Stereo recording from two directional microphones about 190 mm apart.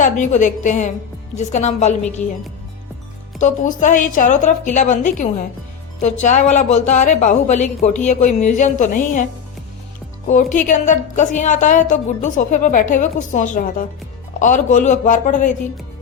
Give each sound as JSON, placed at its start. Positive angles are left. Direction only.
{"t": 0.0, "sound": "speech", "side_deg": 40}
{"t": 3.4, "sound": "speech", "side_deg": 40}
{"t": 10.2, "sound": "speech", "side_deg": 40}